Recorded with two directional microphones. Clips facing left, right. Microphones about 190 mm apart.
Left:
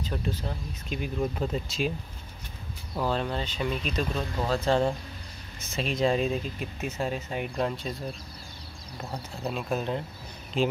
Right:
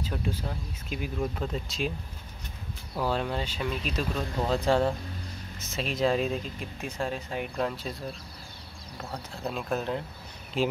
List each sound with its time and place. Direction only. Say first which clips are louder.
0.0 s speech: left 1 dB; 10° right (ahead or behind)
3.0 s speech: even; 5° right (ahead or behind)
5.6 s speech: left 1 dB; centre (ahead or behind)
9.1 s speech: left 1 dB; centre (ahead or behind)